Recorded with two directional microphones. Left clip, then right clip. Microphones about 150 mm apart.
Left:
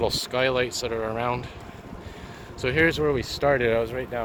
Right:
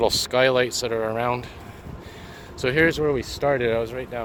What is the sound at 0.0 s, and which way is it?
Speech, 60° right (ahead or behind).